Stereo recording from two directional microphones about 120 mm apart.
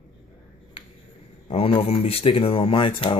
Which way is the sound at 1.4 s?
55° left (ahead or behind).